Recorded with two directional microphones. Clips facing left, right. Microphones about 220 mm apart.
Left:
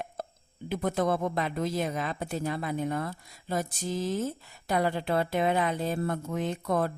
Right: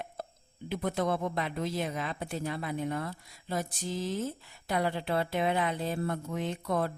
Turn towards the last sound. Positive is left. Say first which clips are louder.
# left 3 dB
turn(degrees=45)  # may be behind; listen again after turning